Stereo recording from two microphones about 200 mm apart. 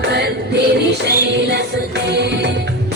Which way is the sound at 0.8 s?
55° right (ahead or behind).